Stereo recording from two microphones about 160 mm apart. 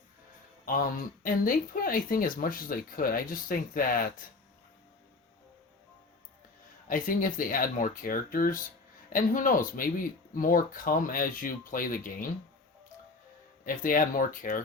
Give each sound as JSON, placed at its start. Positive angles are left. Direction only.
{"t": 0.6, "sound": "speech", "side_deg": 60}
{"t": 6.8, "sound": "speech", "side_deg": 55}
{"t": 13.7, "sound": "speech", "side_deg": 60}